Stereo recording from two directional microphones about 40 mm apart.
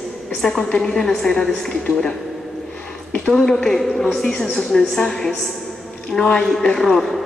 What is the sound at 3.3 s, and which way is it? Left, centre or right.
A woman's voice, centre.